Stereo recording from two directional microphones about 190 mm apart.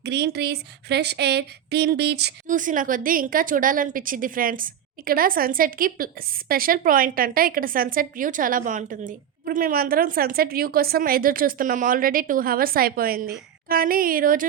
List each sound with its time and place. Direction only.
0.0 s speech: 60° right (ahead or behind)
2.5 s a woman's voice: 45° right (ahead or behind)